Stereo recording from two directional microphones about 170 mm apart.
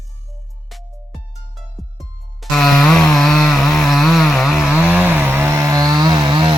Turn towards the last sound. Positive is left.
turn(degrees=-30)  # may be behind; listen again after turning